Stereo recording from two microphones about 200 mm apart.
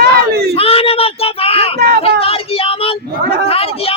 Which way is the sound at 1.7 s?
50° right (ahead or behind).